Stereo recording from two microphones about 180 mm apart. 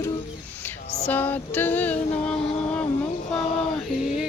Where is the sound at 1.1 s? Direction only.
10° left (ahead or behind).